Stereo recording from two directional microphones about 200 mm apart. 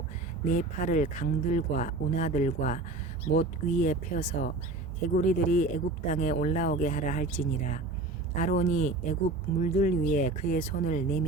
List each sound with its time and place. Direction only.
0.4 s speech: 40° left (ahead or behind)